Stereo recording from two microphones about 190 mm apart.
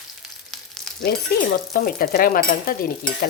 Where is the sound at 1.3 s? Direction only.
55° left (ahead or behind).